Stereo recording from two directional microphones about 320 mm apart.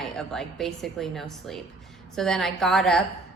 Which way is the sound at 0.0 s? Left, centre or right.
Centre.